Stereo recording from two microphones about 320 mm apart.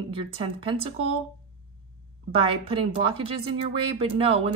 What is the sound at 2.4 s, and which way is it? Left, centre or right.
Speech, centre.